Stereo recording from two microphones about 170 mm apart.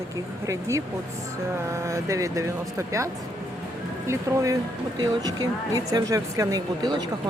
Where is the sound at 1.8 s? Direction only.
20° right (ahead or behind).